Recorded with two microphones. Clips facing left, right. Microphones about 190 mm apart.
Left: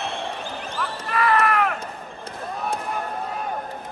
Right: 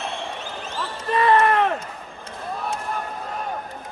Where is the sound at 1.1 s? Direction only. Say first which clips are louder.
Right 4 dB; 25° right (ahead or behind).